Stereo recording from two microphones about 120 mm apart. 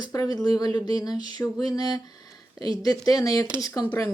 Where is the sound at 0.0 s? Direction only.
30° left (ahead or behind).